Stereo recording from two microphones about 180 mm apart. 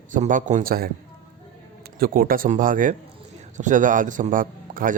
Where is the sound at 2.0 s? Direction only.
55° right (ahead or behind).